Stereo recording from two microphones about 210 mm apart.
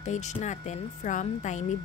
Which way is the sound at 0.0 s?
35° left (ahead or behind).